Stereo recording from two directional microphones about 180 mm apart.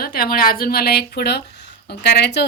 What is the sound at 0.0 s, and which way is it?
Speech, 55° left (ahead or behind).